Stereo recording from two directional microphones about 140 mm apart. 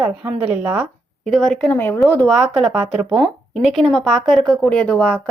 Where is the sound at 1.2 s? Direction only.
Centre (ahead or behind).